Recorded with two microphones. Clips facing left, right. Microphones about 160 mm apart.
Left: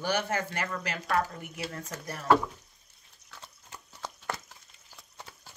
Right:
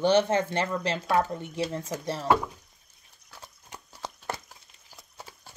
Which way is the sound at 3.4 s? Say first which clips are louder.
Right 3 dB; 15° right (ahead or behind).